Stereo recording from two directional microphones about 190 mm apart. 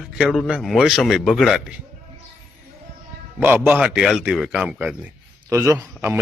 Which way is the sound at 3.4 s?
10° right (ahead or behind).